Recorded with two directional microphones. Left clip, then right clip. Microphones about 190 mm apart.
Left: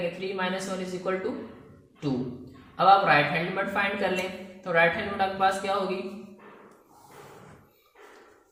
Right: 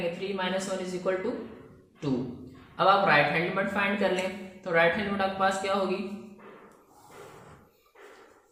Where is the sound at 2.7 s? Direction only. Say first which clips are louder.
Left 2 dB; 25° right (ahead or behind).